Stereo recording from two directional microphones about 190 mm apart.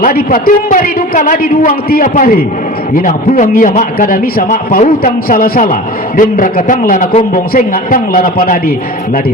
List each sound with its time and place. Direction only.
0.0 s a man's voice: 50° left (ahead or behind)